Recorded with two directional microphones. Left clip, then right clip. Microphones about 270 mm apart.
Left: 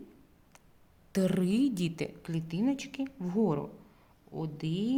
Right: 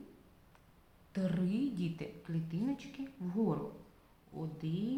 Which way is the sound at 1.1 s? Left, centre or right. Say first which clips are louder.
Left 8 dB; left.